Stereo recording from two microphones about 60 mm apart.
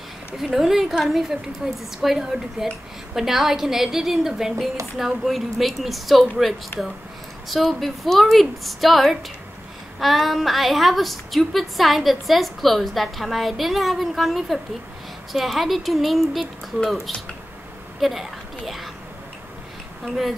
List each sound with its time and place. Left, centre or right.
0.4 s a woman's voice: centre
6.7 s speech: left
7.4 s a woman's voice: centre